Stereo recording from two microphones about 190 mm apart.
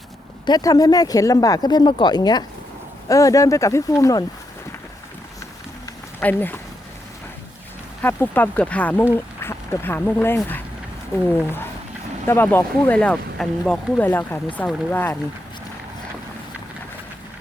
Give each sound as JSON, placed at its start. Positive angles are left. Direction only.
{"t": 0.4, "sound": "speech", "side_deg": 20}
{"t": 5.8, "sound": "a sound", "side_deg": 10}
{"t": 8.0, "sound": "speech", "side_deg": 10}
{"t": 12.3, "sound": "speech", "side_deg": 10}